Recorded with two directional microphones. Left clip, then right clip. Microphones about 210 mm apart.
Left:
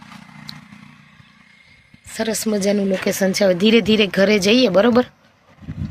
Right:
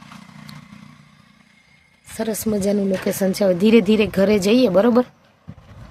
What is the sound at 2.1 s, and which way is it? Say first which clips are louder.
Speech: left 2 dB; centre (ahead or behind).